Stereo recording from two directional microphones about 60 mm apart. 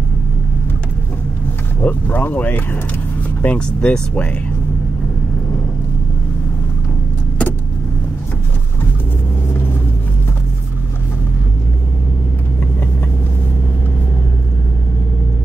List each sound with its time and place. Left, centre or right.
1.8 s speech: left
3.4 s speech: centre